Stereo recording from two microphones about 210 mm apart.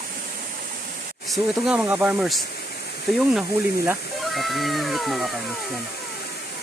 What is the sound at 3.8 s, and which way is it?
Speech, 5° right (ahead or behind).